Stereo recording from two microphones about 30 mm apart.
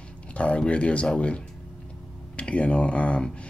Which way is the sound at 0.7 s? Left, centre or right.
Left.